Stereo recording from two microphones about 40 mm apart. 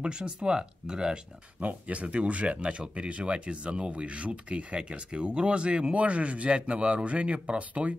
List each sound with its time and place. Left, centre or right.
0.0 s speech: right
1.6 s speech: right